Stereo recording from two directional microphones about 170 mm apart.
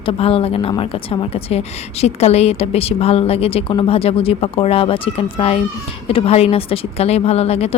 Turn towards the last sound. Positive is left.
turn(degrees=35)  # may be behind; listen again after turning